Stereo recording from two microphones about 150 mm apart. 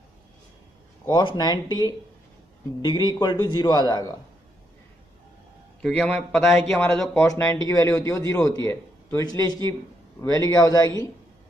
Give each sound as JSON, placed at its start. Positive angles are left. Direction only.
{"t": 1.0, "sound": "a man's voice", "side_deg": 30}
{"t": 5.8, "sound": "a man's voice", "side_deg": 5}
{"t": 7.2, "sound": "a man's voice", "side_deg": 20}